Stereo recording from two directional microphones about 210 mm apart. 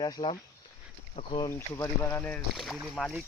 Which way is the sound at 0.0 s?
20° left (ahead or behind).